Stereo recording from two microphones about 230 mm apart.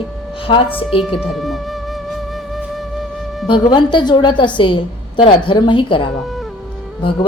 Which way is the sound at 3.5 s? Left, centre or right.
Centre.